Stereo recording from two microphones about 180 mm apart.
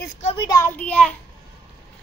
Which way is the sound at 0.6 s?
5° left (ahead or behind).